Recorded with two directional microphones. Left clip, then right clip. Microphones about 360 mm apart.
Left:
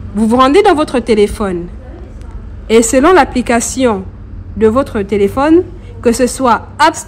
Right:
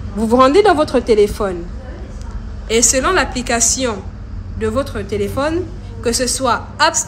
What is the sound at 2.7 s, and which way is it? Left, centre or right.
A woman's voice, centre.